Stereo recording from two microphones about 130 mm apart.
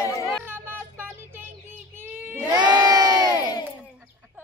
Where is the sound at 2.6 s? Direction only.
35° right (ahead or behind).